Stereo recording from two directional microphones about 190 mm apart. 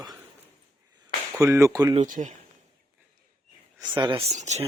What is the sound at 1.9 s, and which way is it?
Speech, 40° right (ahead or behind).